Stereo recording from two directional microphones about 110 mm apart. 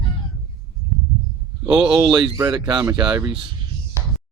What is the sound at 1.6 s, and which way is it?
Speech, 10° right (ahead or behind).